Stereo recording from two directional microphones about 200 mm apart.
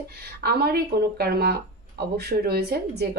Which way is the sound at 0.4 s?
50° right (ahead or behind).